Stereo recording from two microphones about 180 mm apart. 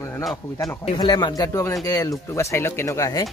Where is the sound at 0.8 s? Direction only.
25° left (ahead or behind).